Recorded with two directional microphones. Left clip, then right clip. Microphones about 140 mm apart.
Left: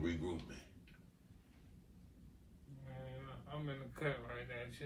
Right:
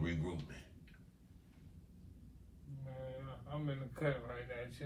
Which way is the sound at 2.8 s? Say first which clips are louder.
Right 5 dB; 10° right (ahead or behind).